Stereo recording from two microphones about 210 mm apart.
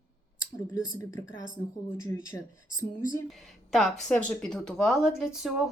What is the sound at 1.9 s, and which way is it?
Speech, 15° left (ahead or behind).